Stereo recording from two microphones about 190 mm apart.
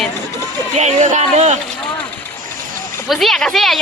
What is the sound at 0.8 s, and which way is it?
Speech, 40° right (ahead or behind).